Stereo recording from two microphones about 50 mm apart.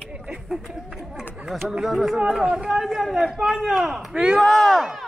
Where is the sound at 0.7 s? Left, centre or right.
Centre.